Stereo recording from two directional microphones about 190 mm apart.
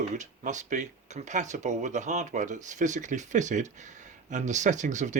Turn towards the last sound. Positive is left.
turn(degrees=-40)  # may be behind; listen again after turning